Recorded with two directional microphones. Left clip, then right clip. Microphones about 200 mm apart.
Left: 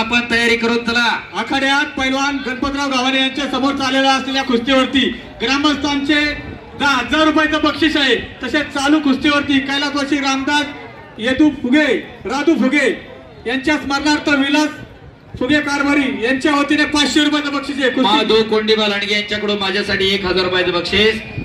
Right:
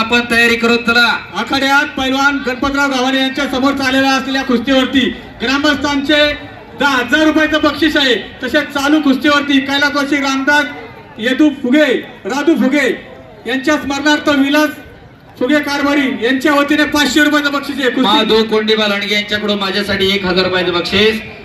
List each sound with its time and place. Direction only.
0.3 s a man's voice: 25° right (ahead or behind)
4.7 s a man's voice: centre (ahead or behind)
5.4 s a man's voice: 15° right (ahead or behind)
6.8 s a man's voice: centre (ahead or behind)
8.7 s a man's voice: 15° right (ahead or behind)
15.5 s a man's voice: centre (ahead or behind)
16.2 s a man's voice: 15° right (ahead or behind)
20.1 s a man's voice: 5° left (ahead or behind)